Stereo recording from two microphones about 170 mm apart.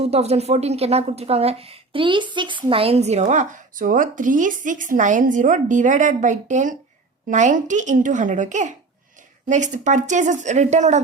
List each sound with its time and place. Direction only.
0.0 s a woman's voice: 40° right (ahead or behind)